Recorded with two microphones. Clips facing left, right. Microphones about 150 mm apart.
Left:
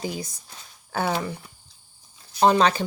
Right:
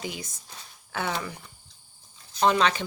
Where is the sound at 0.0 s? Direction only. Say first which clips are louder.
Left 5 dB; 35° left (ahead or behind).